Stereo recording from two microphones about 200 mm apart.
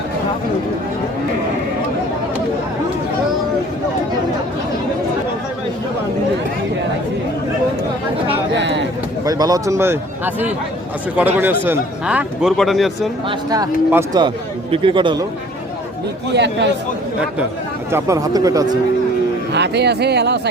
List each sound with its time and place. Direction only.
8.5 s a sound: 60° right (ahead or behind)
9.2 s a man's voice: 20° right (ahead or behind); by 13.1 s centre (ahead or behind)
13.5 s speech: 20° right (ahead or behind)
16.3 s speech: 60° right (ahead or behind)
17.9 s a man's voice: 15° right (ahead or behind)
19.5 s speech: 60° right (ahead or behind)